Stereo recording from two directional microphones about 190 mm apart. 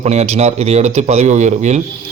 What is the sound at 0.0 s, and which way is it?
A man's voice, 35° right (ahead or behind).